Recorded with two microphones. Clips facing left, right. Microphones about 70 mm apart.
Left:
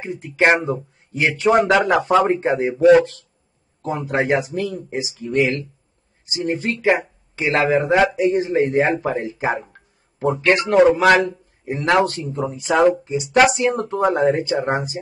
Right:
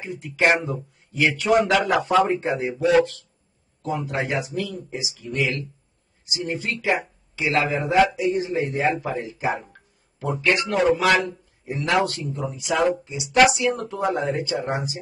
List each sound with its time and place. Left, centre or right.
0.0 s speech: left
3.8 s speech: left